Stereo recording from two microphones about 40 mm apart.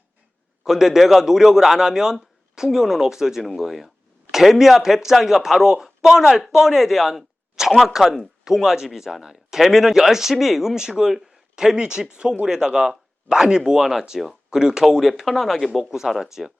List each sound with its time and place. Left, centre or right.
0.6 s speech: centre
8.0 s speech: centre
8.4 s speech: centre
15.2 s speech: centre
15.8 s speech: centre